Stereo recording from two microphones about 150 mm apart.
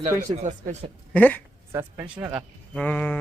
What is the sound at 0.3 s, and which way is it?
Speech, 45° right (ahead or behind).